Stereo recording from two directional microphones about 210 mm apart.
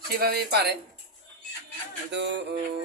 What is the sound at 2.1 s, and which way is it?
Music, 60° right (ahead or behind).